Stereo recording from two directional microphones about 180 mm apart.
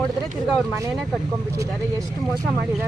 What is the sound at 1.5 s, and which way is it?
Speech, 20° right (ahead or behind).